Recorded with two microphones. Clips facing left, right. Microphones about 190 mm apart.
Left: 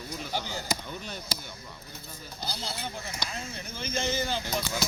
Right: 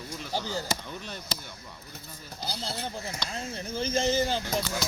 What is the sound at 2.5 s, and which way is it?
Speech, 35° right (ahead or behind).